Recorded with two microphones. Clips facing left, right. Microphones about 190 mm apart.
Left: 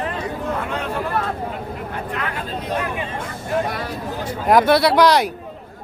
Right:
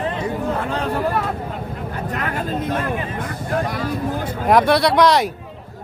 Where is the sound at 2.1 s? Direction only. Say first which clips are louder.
Right 4 dB; 45° right (ahead or behind).